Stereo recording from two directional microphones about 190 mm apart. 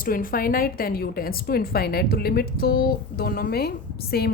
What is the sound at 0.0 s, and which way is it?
A woman's voice, 50° left (ahead or behind).